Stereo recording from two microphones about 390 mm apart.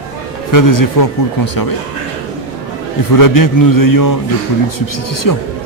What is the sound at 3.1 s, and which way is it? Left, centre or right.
A man's voice, left.